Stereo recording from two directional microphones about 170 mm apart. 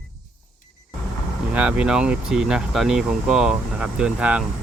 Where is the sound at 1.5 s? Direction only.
5° right (ahead or behind).